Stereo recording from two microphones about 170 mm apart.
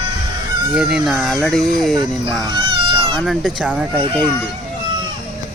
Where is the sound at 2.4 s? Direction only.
25° right (ahead or behind).